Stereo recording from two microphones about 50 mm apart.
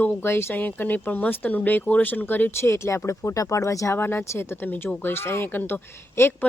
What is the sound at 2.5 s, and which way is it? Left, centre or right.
Speech, left.